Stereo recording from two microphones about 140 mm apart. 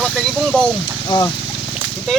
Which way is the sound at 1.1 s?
30° left (ahead or behind).